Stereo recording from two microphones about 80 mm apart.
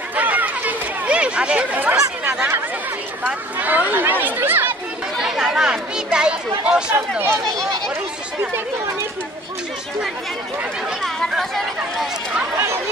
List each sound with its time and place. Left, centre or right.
0.1 s chatter: centre
3.3 s speech: right
5.2 s speech: centre
11.0 s speech: centre